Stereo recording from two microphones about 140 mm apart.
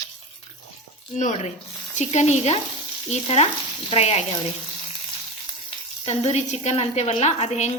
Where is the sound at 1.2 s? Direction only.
55° left (ahead or behind).